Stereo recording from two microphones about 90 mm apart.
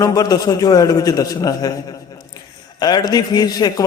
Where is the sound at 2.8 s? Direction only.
50° left (ahead or behind).